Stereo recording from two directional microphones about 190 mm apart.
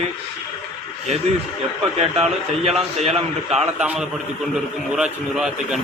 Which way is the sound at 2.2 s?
35° right (ahead or behind).